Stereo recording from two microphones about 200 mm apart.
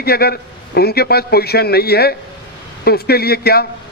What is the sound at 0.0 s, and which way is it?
A man's voice, 50° left (ahead or behind).